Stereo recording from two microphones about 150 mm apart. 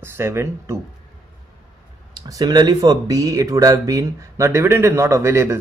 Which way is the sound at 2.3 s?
25° right (ahead or behind).